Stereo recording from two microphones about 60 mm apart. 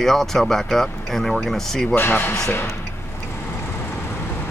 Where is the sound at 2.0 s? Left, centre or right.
Left.